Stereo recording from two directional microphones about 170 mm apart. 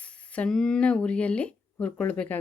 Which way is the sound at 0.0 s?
5° left (ahead or behind).